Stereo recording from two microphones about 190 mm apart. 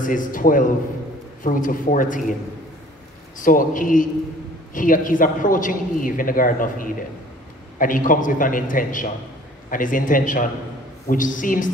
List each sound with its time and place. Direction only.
0.0 s a man's voice: 45° left (ahead or behind)
3.4 s a man's voice: 45° left (ahead or behind)